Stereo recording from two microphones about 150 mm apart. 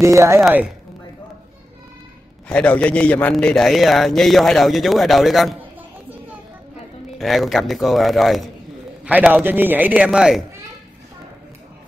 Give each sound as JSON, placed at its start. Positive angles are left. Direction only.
{"t": 0.0, "sound": "speech", "side_deg": -20}
{"t": 0.4, "sound": "a man's voice", "side_deg": 0}
{"t": 2.4, "sound": "a man's voice", "side_deg": 10}
{"t": 7.2, "sound": "a man's voice", "side_deg": 0}